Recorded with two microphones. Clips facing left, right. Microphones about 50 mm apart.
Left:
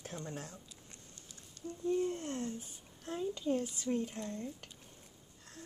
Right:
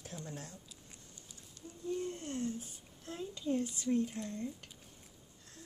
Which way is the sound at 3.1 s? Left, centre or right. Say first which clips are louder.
Left 2 dB; centre.